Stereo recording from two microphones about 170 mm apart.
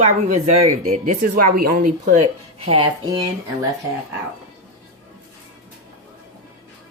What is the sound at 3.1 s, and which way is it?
Speech, 20° right (ahead or behind).